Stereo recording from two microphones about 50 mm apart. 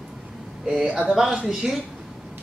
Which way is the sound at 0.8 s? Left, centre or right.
Right.